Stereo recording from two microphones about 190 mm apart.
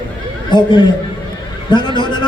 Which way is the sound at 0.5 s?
25° left (ahead or behind).